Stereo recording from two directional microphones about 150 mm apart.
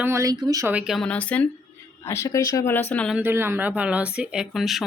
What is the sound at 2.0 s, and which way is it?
Speech, 20° left (ahead or behind).